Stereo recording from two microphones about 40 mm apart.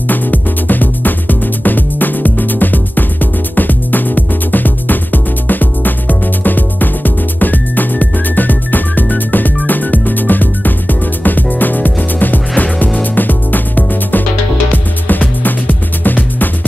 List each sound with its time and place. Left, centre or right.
0.1 s music: left